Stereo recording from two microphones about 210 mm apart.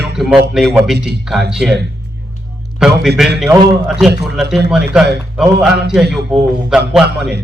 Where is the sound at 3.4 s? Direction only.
15° right (ahead or behind).